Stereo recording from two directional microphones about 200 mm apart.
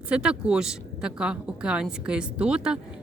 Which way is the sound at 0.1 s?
5° right (ahead or behind).